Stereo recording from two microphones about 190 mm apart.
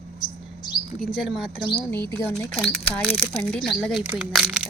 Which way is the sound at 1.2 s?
Centre (ahead or behind).